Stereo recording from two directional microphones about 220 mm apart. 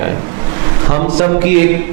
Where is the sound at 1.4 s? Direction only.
10° right (ahead or behind).